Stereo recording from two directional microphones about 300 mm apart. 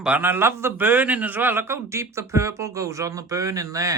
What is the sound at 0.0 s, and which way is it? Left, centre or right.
A man's voice, centre.